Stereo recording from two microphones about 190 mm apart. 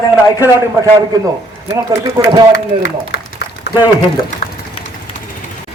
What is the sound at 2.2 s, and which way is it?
Speech, 20° right (ahead or behind).